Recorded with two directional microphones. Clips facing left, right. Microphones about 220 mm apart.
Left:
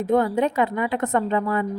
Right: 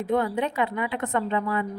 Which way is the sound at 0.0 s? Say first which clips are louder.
Left 5 dB; 45° left (ahead or behind).